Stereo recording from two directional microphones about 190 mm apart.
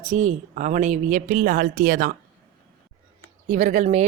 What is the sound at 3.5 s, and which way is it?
Speech, 40° right (ahead or behind).